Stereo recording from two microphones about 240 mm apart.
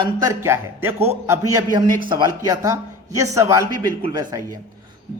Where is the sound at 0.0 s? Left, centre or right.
Centre.